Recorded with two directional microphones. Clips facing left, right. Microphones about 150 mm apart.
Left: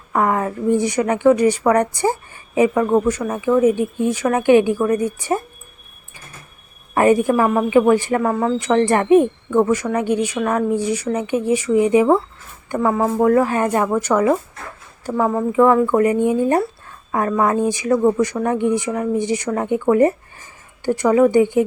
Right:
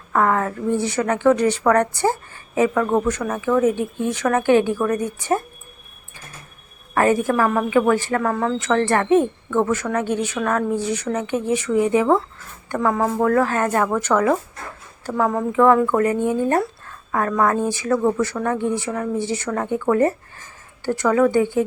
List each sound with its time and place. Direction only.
0.1 s speech: 15° left (ahead or behind)
6.9 s speech: 15° left (ahead or behind)